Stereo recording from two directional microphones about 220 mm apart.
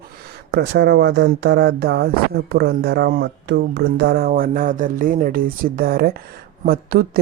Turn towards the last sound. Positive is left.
turn(degrees=-40)  # may be behind; listen again after turning